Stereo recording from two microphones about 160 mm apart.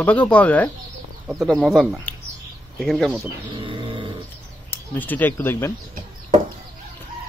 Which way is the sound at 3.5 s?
30° right (ahead or behind).